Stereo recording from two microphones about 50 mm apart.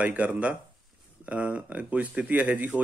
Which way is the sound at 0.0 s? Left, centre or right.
Right.